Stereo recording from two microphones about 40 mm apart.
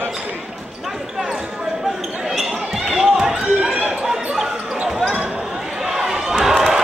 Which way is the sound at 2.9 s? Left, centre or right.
Centre.